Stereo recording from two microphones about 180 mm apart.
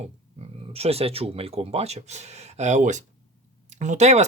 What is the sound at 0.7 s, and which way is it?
Speech, 35° right (ahead or behind).